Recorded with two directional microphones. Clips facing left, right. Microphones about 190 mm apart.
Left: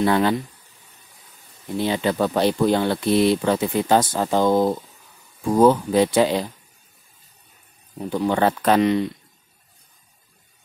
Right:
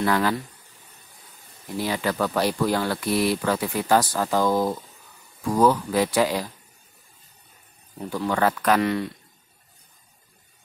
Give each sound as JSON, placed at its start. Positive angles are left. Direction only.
{"t": 0.0, "sound": "speech", "side_deg": 25}
{"t": 1.8, "sound": "speech", "side_deg": 25}
{"t": 8.1, "sound": "speech", "side_deg": 25}